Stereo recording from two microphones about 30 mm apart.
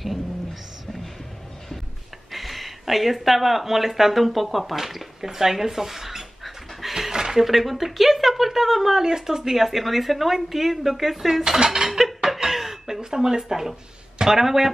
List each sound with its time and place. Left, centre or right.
2.3 s speech: centre
4.7 s dog: centre
7.3 s speech: centre
11.6 s speech: right
12.4 s chuckle: centre
13.0 s speech: right